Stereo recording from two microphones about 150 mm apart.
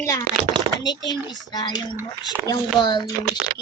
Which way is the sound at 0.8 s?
30° left (ahead or behind).